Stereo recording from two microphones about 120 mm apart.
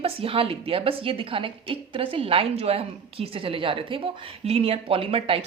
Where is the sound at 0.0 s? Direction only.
50° right (ahead or behind).